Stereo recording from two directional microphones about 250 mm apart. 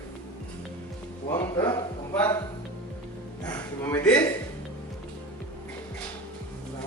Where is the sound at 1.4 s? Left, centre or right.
Centre.